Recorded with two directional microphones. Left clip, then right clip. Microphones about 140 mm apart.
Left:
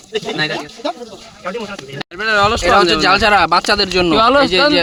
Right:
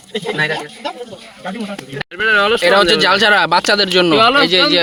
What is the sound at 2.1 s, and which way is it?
Speech, 45° left (ahead or behind).